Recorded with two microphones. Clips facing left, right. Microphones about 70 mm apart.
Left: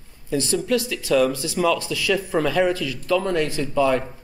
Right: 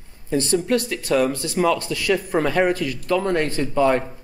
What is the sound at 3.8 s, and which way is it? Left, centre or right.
Speech, right.